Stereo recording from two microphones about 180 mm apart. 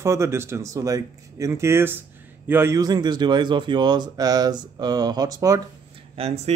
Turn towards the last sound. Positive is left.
turn(degrees=-35)  # may be behind; listen again after turning